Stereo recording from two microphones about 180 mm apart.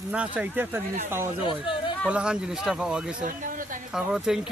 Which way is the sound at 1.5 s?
25° left (ahead or behind).